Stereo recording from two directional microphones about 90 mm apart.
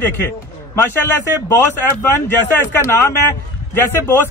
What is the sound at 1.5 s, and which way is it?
A man's voice, 25° left (ahead or behind).